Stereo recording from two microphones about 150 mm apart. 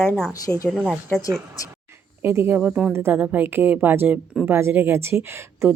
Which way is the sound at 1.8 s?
15° right (ahead or behind).